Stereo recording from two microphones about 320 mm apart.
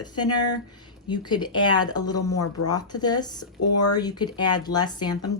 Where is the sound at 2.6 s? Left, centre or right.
Centre.